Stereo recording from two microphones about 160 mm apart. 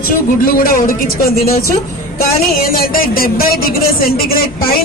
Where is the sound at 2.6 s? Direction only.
65° left (ahead or behind).